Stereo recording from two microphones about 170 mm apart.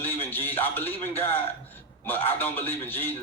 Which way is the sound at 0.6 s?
10° left (ahead or behind).